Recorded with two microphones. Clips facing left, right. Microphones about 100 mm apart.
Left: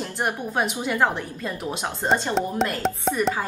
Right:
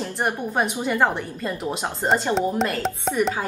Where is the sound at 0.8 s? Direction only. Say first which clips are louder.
Right 1 dB; centre (ahead or behind).